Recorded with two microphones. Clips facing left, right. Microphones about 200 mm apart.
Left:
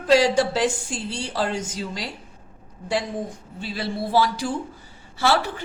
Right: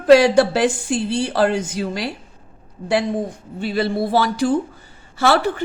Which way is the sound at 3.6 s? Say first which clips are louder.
Right 8 dB; 60° right (ahead or behind).